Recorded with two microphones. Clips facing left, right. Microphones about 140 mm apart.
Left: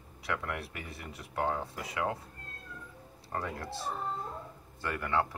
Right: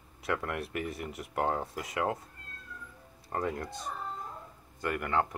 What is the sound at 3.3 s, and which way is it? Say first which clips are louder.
Speech: right 4 dB; 20° right (ahead or behind).